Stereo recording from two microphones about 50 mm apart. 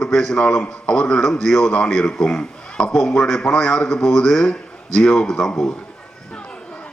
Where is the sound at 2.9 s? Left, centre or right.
Centre.